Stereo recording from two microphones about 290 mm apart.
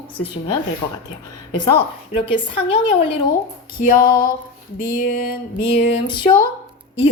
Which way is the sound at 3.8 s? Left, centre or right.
Left.